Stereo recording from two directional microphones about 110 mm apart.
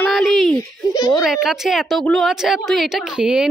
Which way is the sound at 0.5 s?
30° left (ahead or behind).